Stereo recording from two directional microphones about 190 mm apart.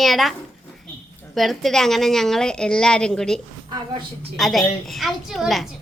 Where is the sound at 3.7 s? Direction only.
25° right (ahead or behind).